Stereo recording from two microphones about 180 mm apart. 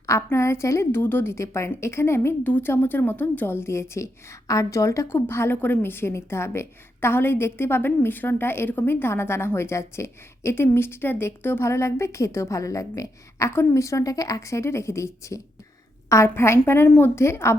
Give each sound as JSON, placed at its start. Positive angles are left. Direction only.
{"t": 0.0, "sound": "a woman's voice", "side_deg": 15}